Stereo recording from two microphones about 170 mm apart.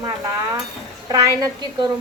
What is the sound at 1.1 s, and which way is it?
Speech, 25° right (ahead or behind).